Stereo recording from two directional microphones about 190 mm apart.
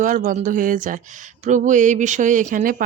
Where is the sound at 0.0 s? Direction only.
40° right (ahead or behind).